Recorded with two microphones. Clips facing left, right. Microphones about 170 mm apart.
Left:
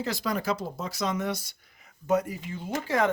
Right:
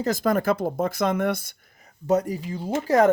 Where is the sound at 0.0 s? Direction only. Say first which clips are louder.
Right 7 dB; 45° right (ahead or behind).